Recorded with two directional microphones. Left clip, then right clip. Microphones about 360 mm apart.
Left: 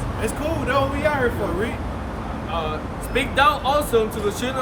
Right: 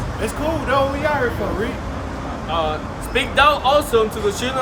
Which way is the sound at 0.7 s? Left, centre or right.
Centre.